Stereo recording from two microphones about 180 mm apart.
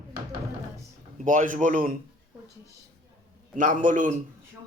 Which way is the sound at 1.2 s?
45° right (ahead or behind).